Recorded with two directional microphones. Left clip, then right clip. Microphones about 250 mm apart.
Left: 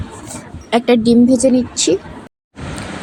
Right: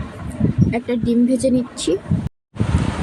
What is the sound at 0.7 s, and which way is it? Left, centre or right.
A woman's voice, left.